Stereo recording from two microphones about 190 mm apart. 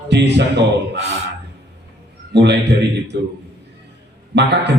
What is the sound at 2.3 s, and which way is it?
Speech, 65° right (ahead or behind).